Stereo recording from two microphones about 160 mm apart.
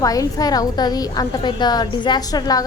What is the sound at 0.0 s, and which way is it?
A woman's voice, 20° left (ahead or behind).